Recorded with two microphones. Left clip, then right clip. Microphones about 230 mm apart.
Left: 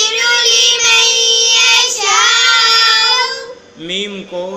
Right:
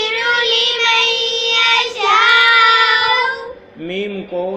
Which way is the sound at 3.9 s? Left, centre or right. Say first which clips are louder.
Left 2 dB; centre.